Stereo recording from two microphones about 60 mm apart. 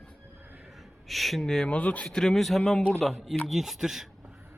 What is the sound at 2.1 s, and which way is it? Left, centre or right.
Speech, centre.